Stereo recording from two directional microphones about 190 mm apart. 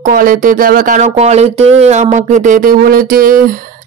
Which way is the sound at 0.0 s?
45° right (ahead or behind).